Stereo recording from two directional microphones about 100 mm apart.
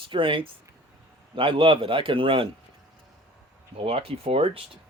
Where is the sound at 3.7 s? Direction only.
70° right (ahead or behind).